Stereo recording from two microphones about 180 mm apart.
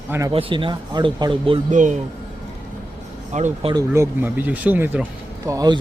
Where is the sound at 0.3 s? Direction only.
30° right (ahead or behind).